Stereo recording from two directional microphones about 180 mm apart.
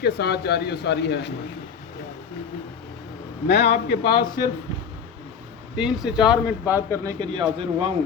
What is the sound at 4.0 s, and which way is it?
Speech, 25° left (ahead or behind).